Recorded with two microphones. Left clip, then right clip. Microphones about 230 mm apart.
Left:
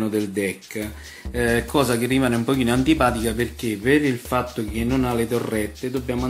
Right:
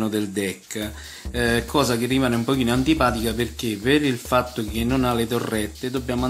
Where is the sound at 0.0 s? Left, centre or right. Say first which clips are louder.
Left 1 dB; centre.